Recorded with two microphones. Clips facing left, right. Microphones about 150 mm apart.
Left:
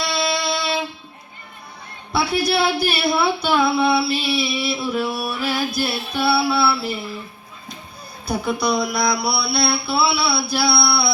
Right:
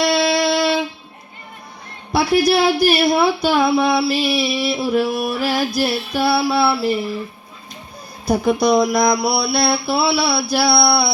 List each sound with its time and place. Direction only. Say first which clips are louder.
0.0 s a sound: right 7 dB; 45° right (ahead or behind)
2.1 s speech: right 5 dB; 45° right (ahead or behind)
8.3 s speech: right 6 dB; 45° right (ahead or behind)